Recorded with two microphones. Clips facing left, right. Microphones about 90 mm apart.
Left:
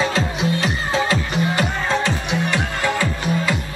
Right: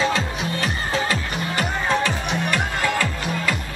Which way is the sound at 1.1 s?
20° left (ahead or behind).